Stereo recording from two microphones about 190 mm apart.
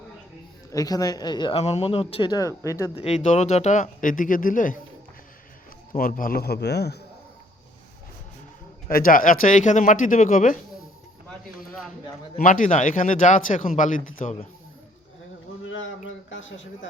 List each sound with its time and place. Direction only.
0.7 s speech: 20° left (ahead or behind)
2.9 s speech: 35° left (ahead or behind)
5.9 s a man's voice: 45° left (ahead or behind)
8.9 s a man's voice: 50° left (ahead or behind)
12.4 s speech: 45° left (ahead or behind)
15.6 s a sound: 90° left